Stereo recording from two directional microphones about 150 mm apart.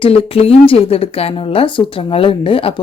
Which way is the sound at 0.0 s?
40° left (ahead or behind).